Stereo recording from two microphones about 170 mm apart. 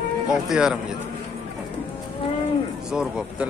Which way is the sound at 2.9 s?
5° right (ahead or behind).